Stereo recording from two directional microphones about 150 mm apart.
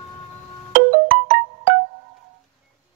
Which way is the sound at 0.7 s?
60° right (ahead or behind).